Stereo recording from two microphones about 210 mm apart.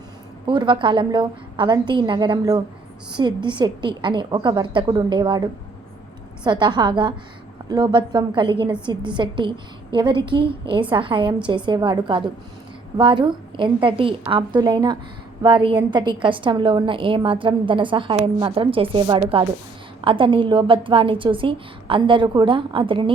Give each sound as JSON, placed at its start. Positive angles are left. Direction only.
{"t": 0.4, "sound": "a woman's voice", "side_deg": -20}